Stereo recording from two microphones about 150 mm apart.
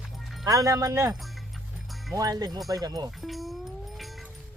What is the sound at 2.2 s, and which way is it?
Speech, 25° right (ahead or behind).